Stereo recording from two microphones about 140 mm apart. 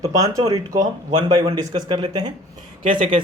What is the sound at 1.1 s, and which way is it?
A man's voice, 35° right (ahead or behind).